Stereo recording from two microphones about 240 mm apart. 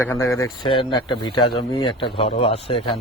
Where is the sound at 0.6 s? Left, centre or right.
Centre.